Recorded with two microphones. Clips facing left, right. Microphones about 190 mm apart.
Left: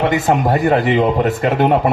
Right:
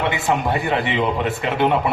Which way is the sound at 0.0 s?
40° left (ahead or behind).